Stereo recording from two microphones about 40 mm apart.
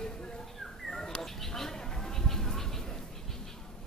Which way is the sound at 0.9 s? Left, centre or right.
Centre.